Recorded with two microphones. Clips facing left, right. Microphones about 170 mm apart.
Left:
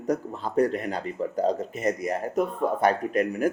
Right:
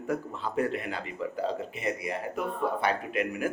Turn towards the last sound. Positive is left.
turn(degrees=40)  # may be behind; listen again after turning